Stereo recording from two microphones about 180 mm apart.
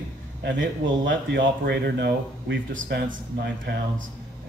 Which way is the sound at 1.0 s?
75° right (ahead or behind).